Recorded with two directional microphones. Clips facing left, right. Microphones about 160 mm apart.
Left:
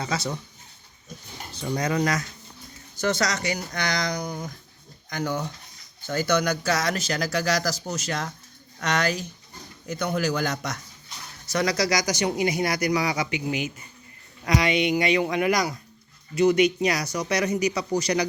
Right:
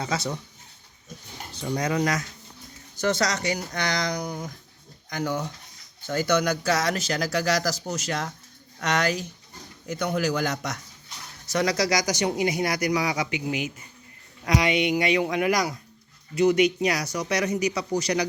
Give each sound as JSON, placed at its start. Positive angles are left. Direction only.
{"t": 0.0, "sound": "speech", "side_deg": -20}
{"t": 1.5, "sound": "a man's voice", "side_deg": -15}
{"t": 2.9, "sound": "speech", "side_deg": -30}
{"t": 6.1, "sound": "a man's voice", "side_deg": -20}